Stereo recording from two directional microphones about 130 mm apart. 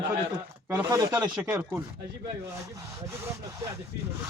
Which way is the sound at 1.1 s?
10° right (ahead or behind).